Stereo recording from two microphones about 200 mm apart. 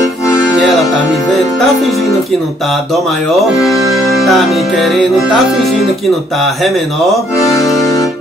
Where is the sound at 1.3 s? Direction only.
Centre (ahead or behind).